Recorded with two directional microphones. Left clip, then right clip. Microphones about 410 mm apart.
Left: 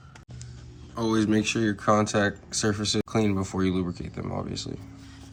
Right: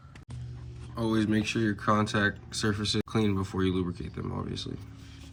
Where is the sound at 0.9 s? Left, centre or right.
Centre.